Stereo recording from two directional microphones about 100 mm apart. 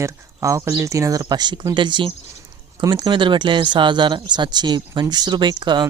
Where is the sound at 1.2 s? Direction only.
45° right (ahead or behind).